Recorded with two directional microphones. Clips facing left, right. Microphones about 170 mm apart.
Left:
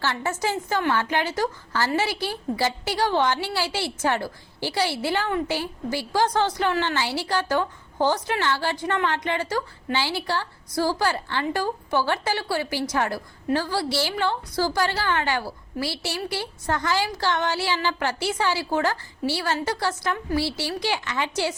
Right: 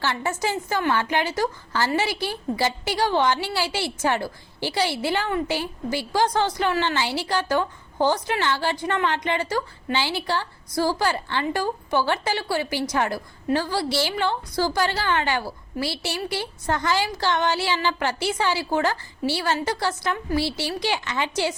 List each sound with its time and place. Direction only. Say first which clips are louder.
0.0 s a woman's voice: right 1 dB; 15° right (ahead or behind)